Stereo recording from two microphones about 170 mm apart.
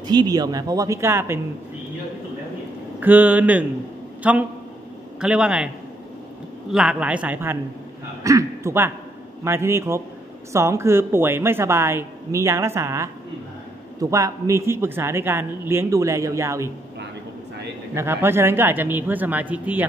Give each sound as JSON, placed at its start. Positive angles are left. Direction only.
{"t": 0.0, "sound": "speech", "side_deg": -25}
{"t": 3.0, "sound": "a man's voice", "side_deg": -10}
{"t": 6.7, "sound": "a man's voice", "side_deg": -5}
{"t": 17.9, "sound": "a man's voice", "side_deg": -15}